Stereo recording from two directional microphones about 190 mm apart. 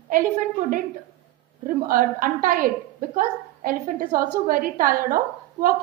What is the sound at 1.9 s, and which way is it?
A woman's voice, 50° right (ahead or behind).